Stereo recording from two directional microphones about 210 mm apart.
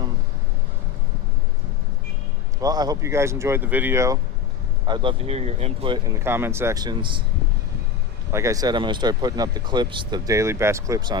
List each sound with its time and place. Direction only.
2.6 s speech: 20° right (ahead or behind)
4.9 s speech: 25° right (ahead or behind)
8.3 s speech: 15° right (ahead or behind)